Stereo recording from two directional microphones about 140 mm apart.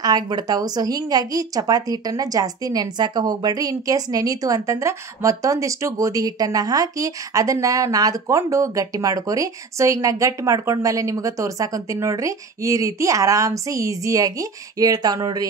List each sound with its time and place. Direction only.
0.0 s a woman's voice: 30° right (ahead or behind)